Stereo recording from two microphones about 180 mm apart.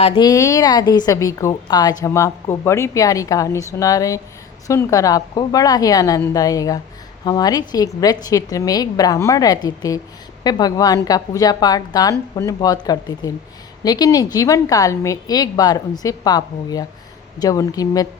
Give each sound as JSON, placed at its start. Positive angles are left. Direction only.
{"t": 0.2, "sound": "a woman's voice", "side_deg": 20}